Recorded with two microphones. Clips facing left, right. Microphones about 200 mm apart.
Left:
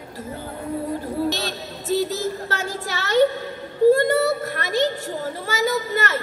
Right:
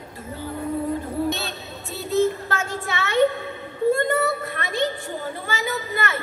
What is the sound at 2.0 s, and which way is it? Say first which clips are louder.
A woman's voice: right 3 dB; 40° left (ahead or behind).